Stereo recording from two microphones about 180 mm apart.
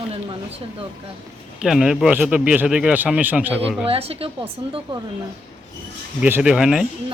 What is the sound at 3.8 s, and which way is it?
Speech, 35° right (ahead or behind).